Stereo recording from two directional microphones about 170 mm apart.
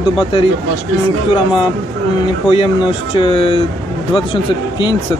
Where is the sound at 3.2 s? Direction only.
35° left (ahead or behind).